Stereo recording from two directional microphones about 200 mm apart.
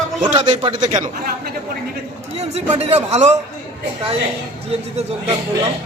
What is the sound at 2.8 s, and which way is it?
Speech, 30° right (ahead or behind).